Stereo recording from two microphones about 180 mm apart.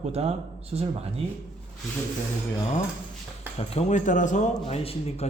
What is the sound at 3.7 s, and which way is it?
A man's voice, 40° left (ahead or behind).